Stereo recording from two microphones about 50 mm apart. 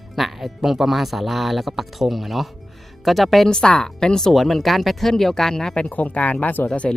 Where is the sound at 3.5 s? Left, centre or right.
Centre.